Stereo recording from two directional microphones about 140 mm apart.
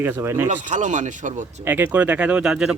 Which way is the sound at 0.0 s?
15° right (ahead or behind).